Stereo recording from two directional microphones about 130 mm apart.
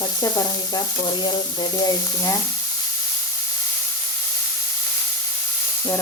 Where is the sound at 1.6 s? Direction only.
25° left (ahead or behind).